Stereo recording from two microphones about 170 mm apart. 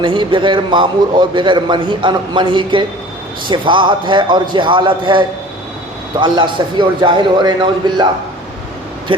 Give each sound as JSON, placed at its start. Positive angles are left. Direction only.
{"t": 0.0, "sound": "a man's voice", "side_deg": -30}